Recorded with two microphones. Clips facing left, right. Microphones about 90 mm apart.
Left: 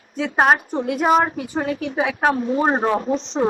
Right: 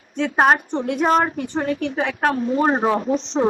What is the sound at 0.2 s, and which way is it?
Speech, centre (ahead or behind).